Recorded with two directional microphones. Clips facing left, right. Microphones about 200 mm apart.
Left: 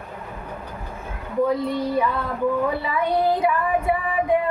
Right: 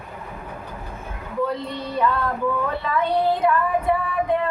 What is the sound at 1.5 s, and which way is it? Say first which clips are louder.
Speech: left 5 dB; 10° left (ahead or behind).